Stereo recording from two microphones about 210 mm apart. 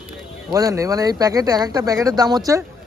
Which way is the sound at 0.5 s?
15° right (ahead or behind).